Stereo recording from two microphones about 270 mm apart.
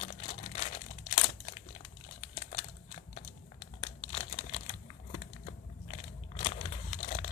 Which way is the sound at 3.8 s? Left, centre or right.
Left.